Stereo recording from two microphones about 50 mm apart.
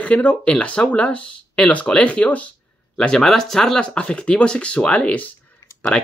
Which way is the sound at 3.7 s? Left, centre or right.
Left.